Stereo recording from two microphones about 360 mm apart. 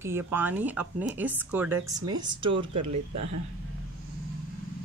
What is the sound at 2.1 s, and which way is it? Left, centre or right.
Speech, right.